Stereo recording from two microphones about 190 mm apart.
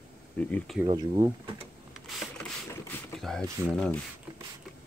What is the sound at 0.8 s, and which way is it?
Speech, 25° right (ahead or behind).